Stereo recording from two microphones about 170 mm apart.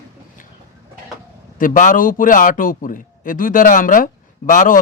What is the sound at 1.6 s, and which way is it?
A man's voice, 50° left (ahead or behind).